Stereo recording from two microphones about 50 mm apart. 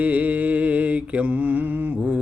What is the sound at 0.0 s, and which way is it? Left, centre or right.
Mantra, right.